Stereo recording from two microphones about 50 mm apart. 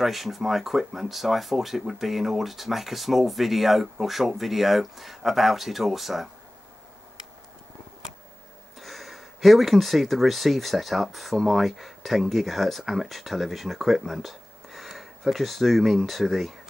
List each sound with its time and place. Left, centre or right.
0.0 s speech: centre
8.7 s speech: centre